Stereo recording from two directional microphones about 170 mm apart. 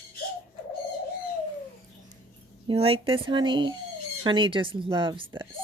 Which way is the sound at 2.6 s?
35° right (ahead or behind).